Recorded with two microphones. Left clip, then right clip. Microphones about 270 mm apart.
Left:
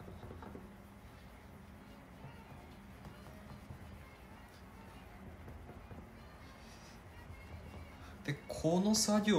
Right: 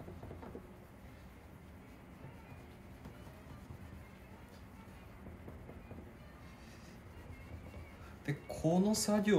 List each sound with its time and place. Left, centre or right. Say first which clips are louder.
8.3 s speech: even; centre